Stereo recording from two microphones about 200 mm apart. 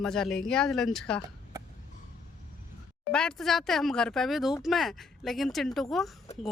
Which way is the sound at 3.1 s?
5° left (ahead or behind).